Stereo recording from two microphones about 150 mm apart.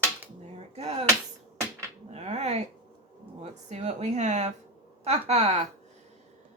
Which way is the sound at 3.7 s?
50° right (ahead or behind).